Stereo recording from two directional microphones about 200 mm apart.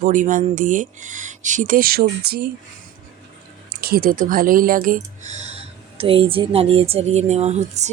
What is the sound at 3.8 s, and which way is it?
Speech, 45° right (ahead or behind).